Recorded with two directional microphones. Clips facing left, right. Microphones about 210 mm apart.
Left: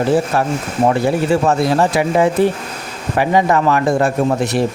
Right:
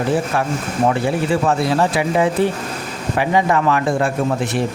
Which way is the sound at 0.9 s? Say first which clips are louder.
Left 3 dB; 40° left (ahead or behind).